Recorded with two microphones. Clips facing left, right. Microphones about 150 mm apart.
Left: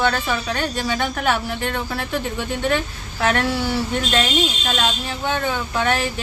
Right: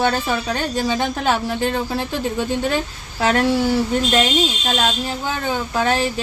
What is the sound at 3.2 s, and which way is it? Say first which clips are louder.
Speech: right 2 dB; 30° right (ahead or behind).